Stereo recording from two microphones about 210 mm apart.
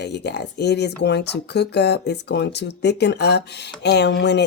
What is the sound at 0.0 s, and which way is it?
Speech, 55° left (ahead or behind).